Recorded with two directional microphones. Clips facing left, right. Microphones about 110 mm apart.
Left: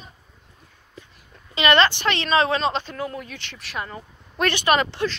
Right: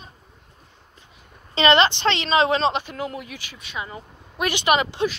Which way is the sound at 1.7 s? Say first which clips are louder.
Left 1 dB; 20° right (ahead or behind).